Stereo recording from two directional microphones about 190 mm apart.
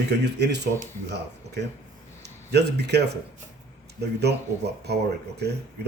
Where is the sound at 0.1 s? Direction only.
65° right (ahead or behind).